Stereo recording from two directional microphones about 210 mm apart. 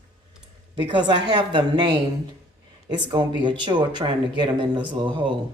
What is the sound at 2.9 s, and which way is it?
Speech, 20° right (ahead or behind).